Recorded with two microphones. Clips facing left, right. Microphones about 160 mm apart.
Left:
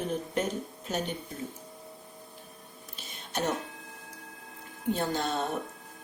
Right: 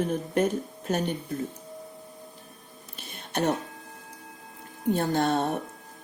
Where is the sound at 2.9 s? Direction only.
55° right (ahead or behind).